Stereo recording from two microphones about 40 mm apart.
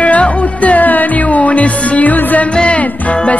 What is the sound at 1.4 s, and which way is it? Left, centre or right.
Music, left.